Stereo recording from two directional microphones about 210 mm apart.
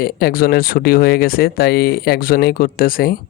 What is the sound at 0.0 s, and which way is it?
Speech, 45° left (ahead or behind).